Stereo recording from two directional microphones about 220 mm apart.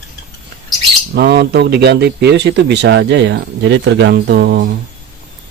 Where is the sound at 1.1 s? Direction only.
45° right (ahead or behind).